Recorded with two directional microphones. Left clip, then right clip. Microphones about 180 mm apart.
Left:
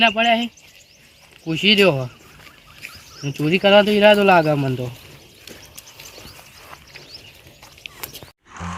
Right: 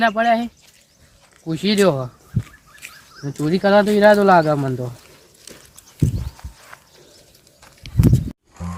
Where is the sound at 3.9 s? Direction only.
Centre (ahead or behind).